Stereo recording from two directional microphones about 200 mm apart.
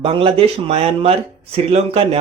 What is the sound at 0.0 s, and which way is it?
Speech, 25° right (ahead or behind).